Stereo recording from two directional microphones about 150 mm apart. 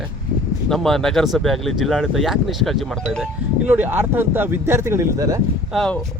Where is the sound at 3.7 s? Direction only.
10° right (ahead or behind).